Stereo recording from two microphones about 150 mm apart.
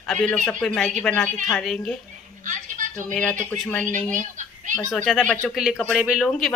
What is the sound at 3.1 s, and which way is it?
Speech, 5° left (ahead or behind).